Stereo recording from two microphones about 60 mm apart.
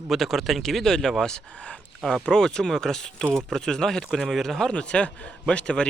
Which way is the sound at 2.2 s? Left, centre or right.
Centre.